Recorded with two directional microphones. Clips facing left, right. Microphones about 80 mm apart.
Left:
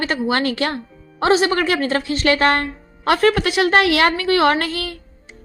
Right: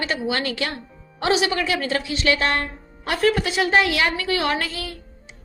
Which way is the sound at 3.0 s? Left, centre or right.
Left.